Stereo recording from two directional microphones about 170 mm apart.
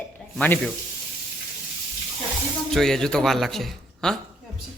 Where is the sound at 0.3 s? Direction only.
10° left (ahead or behind).